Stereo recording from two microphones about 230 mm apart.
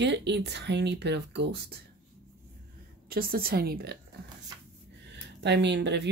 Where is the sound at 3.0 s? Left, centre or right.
Right.